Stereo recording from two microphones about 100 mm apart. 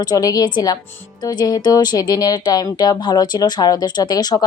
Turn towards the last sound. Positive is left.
turn(degrees=40)  # may be behind; listen again after turning